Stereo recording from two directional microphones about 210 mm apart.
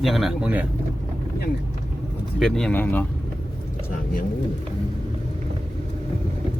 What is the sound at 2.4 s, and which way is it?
Speech, 5° left (ahead or behind).